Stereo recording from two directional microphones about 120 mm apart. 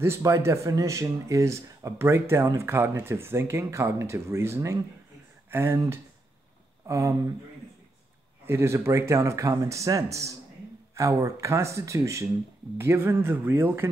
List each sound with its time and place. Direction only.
0.0 s speech: 25° right (ahead or behind)
8.5 s speech: 20° right (ahead or behind)